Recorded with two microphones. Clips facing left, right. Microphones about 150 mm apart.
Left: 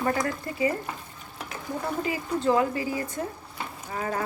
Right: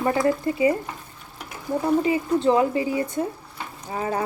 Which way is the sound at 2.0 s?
25° right (ahead or behind).